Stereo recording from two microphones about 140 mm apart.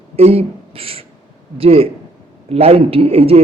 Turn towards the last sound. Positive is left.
turn(degrees=-45)  # may be behind; listen again after turning